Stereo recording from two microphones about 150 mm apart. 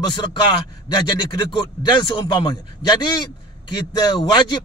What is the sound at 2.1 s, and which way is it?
A man's voice, 30° left (ahead or behind).